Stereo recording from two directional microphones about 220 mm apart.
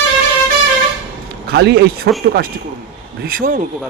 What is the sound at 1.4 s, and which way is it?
Speech, 50° right (ahead or behind).